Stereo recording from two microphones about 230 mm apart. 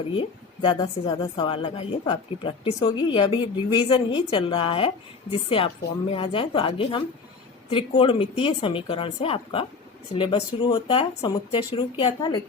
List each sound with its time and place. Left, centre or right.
0.2 s a woman's voice: left